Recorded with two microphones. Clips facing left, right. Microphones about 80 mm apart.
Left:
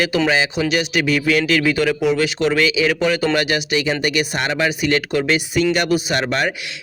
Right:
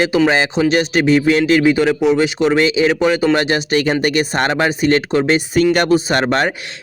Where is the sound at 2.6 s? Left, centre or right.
Right.